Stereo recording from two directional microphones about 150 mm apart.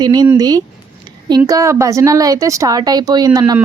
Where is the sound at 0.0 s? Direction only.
30° right (ahead or behind).